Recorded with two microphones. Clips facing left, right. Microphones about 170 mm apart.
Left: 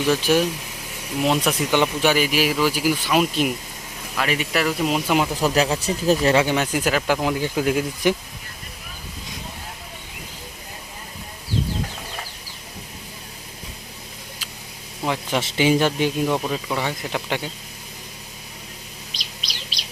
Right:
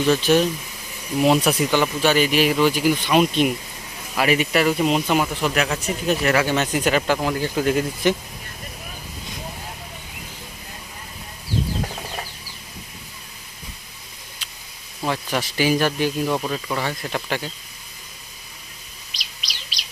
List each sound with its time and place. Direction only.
0.1 s speech: 10° left (ahead or behind)
1.2 s speech: 5° right (ahead or behind)
1.7 s speech: 15° left (ahead or behind)
5.3 s speech: 35° left (ahead or behind)
6.4 s speech: 10° left (ahead or behind)
7.2 s speech: 15° left (ahead or behind)
15.0 s speech: 15° left (ahead or behind)
16.4 s speech: 10° left (ahead or behind)